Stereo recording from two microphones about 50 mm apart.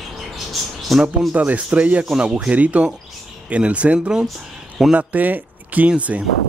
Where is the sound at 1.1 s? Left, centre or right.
Right.